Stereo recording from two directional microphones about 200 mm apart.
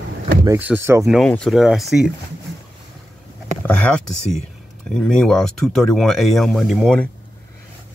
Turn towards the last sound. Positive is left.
turn(degrees=5)  # may be behind; listen again after turning